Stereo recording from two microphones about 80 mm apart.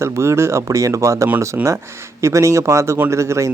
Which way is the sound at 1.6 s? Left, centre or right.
Right.